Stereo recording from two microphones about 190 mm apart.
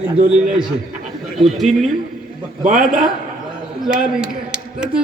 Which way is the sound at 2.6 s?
40° right (ahead or behind).